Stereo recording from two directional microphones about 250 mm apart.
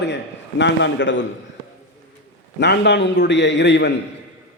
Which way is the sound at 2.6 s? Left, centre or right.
Left.